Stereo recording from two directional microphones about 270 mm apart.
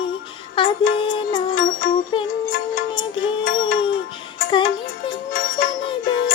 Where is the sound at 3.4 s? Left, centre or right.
Left.